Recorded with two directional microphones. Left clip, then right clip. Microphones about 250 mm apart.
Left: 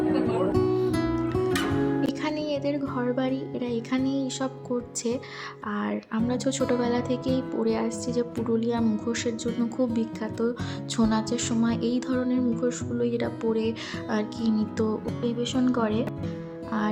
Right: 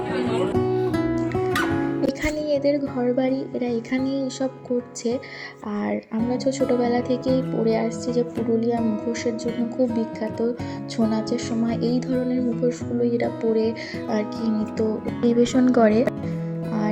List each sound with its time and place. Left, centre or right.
0.5 s music: centre
5.7 s speech: centre
15.2 s speech: centre